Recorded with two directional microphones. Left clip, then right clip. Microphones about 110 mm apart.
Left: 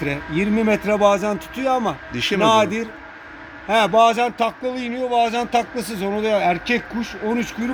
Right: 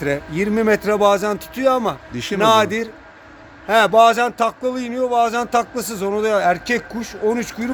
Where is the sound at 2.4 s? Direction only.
80° right.